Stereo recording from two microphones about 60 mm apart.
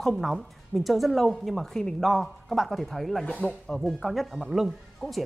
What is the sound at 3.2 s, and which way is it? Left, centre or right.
Speech, left.